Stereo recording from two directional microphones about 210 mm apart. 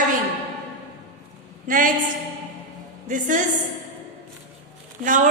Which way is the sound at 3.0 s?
40° right (ahead or behind).